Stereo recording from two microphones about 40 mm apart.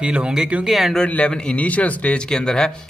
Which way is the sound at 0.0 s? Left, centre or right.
Right.